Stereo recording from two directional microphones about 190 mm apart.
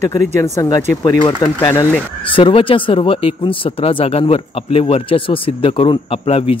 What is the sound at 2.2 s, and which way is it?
Speech, 25° left (ahead or behind).